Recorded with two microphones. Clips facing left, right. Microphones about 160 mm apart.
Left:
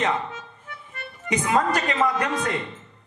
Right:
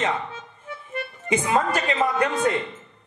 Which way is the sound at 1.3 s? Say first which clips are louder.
Even; 30° right (ahead or behind).